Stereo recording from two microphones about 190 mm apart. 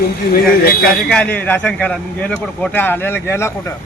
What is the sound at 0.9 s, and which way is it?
A man's voice, 5° left (ahead or behind).